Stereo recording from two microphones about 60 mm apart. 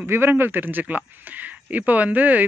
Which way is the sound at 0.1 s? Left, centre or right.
Right.